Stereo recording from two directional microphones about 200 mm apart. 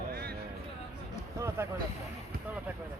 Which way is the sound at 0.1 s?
50° right (ahead or behind).